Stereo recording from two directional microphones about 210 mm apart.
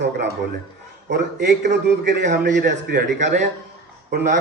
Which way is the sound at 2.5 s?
55° right (ahead or behind).